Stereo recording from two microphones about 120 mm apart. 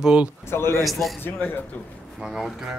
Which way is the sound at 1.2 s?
15° left (ahead or behind).